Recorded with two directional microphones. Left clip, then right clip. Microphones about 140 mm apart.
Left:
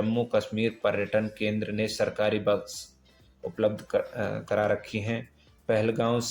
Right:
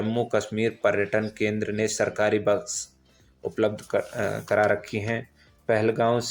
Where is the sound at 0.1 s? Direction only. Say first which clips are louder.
Right 1 dB; 45° right (ahead or behind).